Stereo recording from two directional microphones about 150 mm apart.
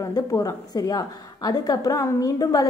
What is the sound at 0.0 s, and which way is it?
A woman's voice, 25° left (ahead or behind).